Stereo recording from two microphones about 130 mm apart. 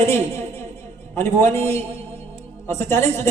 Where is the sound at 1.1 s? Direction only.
20° left (ahead or behind).